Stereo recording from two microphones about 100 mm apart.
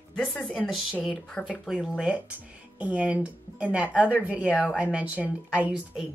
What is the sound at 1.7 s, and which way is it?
Speech, 10° right (ahead or behind).